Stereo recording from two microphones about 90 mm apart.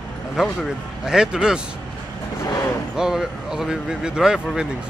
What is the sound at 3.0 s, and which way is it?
Speech, 5° right (ahead or behind).